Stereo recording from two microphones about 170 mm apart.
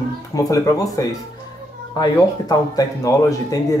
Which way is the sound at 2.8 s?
20° left (ahead or behind).